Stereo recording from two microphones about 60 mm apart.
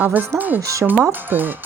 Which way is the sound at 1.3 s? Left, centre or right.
Right.